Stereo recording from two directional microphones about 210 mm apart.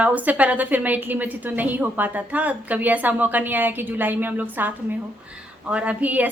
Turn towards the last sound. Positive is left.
turn(degrees=-5)  # may be behind; listen again after turning